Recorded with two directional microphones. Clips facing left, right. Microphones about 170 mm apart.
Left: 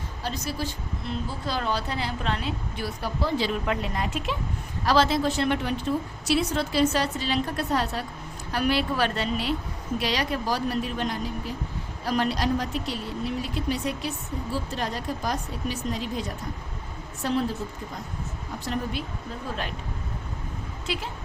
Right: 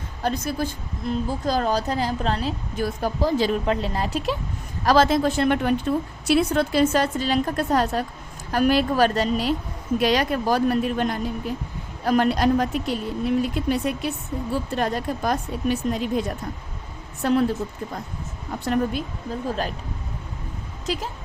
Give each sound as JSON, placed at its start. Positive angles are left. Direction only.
{"t": 0.2, "sound": "a woman's voice", "side_deg": -50}
{"t": 3.7, "sound": "speech", "side_deg": -30}
{"t": 4.9, "sound": "a woman's voice", "side_deg": -50}
{"t": 17.2, "sound": "speech", "side_deg": -55}
{"t": 18.6, "sound": "speech", "side_deg": -55}
{"t": 20.8, "sound": "speech", "side_deg": -40}